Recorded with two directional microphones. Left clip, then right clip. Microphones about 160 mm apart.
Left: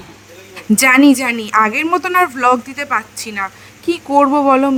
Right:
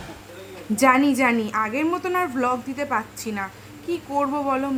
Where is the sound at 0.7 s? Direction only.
65° left (ahead or behind).